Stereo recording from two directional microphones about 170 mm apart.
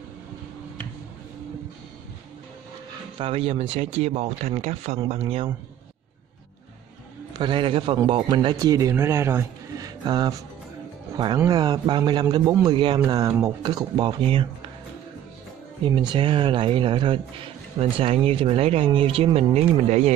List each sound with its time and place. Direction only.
3.2 s speech: 35° right (ahead or behind)
7.3 s a man's voice: 30° right (ahead or behind)
16.1 s speech: 30° right (ahead or behind)